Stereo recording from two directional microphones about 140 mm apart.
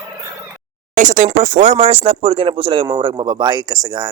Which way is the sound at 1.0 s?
65° right (ahead or behind).